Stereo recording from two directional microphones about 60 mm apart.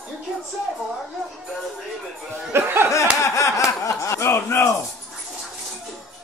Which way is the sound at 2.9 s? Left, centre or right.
Left.